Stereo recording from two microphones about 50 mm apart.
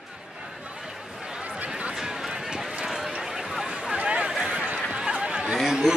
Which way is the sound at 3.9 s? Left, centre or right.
Right.